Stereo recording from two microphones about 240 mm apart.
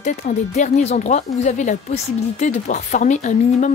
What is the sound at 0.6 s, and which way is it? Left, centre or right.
Speech, left.